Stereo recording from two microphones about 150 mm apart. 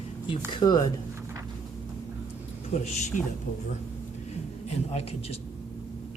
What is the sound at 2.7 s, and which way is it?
Speech, 50° left (ahead or behind).